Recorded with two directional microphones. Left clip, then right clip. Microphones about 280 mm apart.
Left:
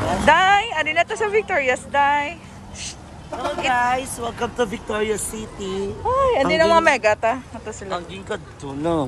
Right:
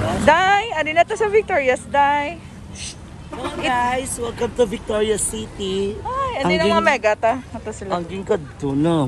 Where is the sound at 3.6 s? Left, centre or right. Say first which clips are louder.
Even; centre.